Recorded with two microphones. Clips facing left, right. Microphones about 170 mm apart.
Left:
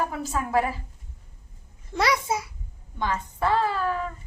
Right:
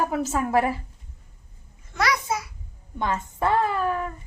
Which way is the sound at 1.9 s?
25° left (ahead or behind).